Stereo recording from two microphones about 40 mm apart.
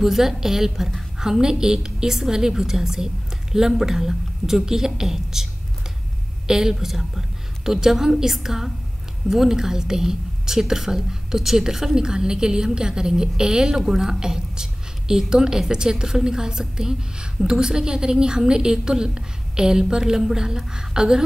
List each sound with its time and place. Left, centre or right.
0.0 s a woman's voice: centre